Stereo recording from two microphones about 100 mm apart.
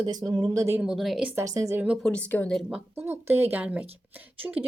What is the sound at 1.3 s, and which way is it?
Speech, 30° right (ahead or behind).